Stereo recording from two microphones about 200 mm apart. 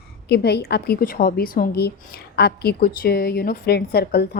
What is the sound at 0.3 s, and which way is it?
A woman's voice, 55° left (ahead or behind).